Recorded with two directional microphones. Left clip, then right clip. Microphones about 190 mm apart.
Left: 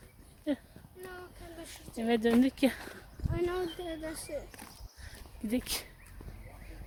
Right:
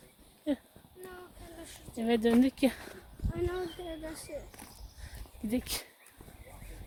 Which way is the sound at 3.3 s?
60° left (ahead or behind).